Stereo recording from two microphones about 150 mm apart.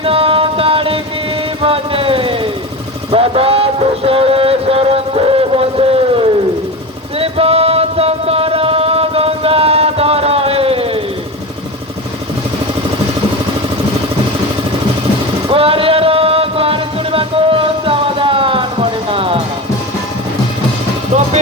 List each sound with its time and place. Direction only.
0.0 s music: 40° right (ahead or behind)
1.6 s a sound: 35° right (ahead or behind)
3.1 s music: 40° right (ahead or behind)
7.2 s chant: 40° right (ahead or behind)
15.4 s music: 40° right (ahead or behind)